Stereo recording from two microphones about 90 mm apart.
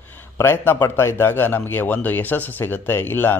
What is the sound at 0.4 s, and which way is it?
A man's voice, 25° left (ahead or behind).